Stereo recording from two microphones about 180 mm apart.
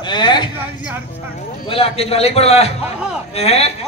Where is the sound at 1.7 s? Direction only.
35° left (ahead or behind).